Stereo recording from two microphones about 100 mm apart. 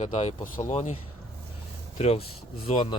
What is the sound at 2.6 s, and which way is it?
Speech, 65° left (ahead or behind).